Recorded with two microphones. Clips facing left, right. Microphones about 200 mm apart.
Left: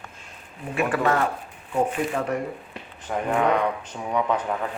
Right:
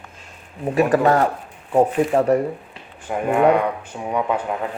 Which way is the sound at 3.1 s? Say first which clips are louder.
Right 6 dB; 10° right (ahead or behind).